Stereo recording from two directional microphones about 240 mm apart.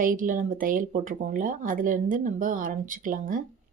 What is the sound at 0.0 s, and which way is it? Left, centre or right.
Speech, right.